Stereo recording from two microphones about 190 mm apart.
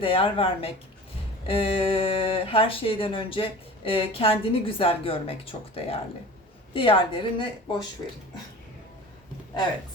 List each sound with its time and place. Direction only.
0.0 s speech: 30° left (ahead or behind)